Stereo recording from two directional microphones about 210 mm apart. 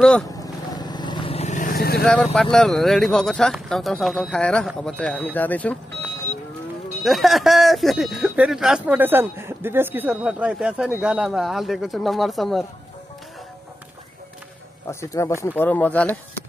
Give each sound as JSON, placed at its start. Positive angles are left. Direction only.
{"t": 0.4, "sound": "vehicle", "side_deg": 20}
{"t": 2.5, "sound": "speech", "side_deg": 5}
{"t": 14.9, "sound": "speech", "side_deg": 15}